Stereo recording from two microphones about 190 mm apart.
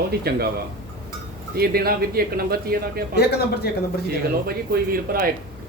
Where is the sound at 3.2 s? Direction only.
60° left (ahead or behind).